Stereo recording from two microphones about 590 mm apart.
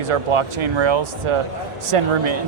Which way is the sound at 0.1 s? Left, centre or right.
Right.